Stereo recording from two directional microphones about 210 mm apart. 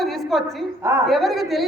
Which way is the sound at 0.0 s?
Centre (ahead or behind).